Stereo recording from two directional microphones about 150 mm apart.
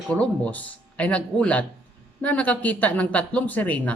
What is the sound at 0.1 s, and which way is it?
Speech, 10° left (ahead or behind).